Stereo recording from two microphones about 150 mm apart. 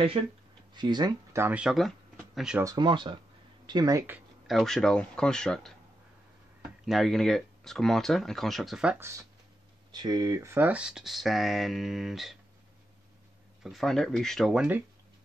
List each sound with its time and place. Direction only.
0.7 s speech: 30° right (ahead or behind)
1.3 s speech: 15° right (ahead or behind)
2.6 s speech: 25° right (ahead or behind)
4.5 s speech: centre (ahead or behind)
6.8 s speech: centre (ahead or behind)
9.8 s speech: 30° right (ahead or behind); by 12.4 s centre (ahead or behind)
13.6 s speech: centre (ahead or behind)